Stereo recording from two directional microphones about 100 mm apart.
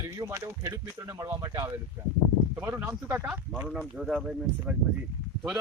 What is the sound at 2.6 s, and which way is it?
Speech, 25° right (ahead or behind).